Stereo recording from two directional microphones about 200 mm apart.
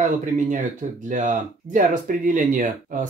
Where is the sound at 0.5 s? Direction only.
40° right (ahead or behind).